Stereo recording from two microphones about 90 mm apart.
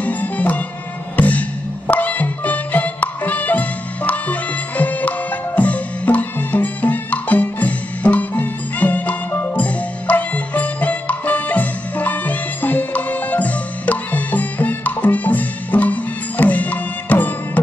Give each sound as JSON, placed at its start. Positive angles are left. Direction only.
{"t": 0.0, "sound": "music", "side_deg": 15}